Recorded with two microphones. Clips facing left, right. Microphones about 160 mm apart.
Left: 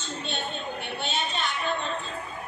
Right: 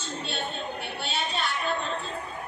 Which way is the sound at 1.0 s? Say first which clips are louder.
Even; 5° right (ahead or behind).